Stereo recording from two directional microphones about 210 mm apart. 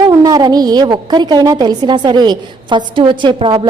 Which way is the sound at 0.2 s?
20° right (ahead or behind).